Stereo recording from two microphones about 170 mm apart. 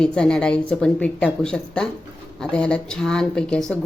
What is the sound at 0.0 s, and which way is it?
Speech, 5° left (ahead or behind).